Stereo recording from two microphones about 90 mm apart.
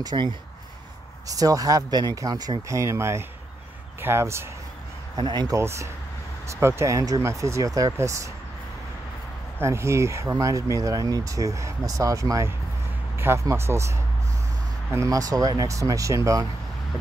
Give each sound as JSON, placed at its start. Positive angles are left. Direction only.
{"t": 0.0, "sound": "speech", "side_deg": -55}
{"t": 1.2, "sound": "speech", "side_deg": -40}
{"t": 2.7, "sound": "speech", "side_deg": -35}
{"t": 5.1, "sound": "speech", "side_deg": -50}
{"t": 5.6, "sound": "speech", "side_deg": -30}
{"t": 9.6, "sound": "speech", "side_deg": -30}